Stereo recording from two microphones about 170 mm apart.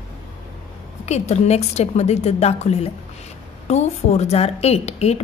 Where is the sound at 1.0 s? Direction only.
40° left (ahead or behind).